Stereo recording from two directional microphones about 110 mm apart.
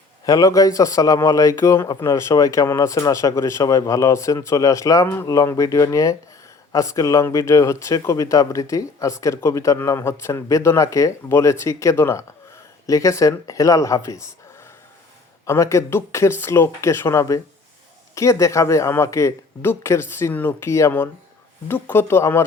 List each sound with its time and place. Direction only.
0.3 s speech: 35° left (ahead or behind)
15.4 s speech: 25° left (ahead or behind)